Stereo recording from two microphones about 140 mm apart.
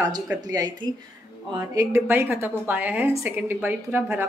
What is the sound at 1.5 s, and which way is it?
A woman's voice, 25° right (ahead or behind).